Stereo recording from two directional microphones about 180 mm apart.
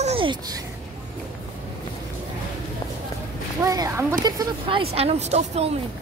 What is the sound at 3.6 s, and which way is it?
Speech, 20° right (ahead or behind).